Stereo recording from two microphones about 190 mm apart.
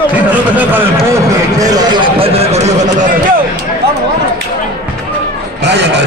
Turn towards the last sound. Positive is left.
turn(degrees=-65)  # may be behind; listen again after turning